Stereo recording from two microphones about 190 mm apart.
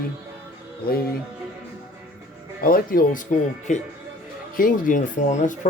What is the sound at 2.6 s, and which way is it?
Speech, 50° left (ahead or behind).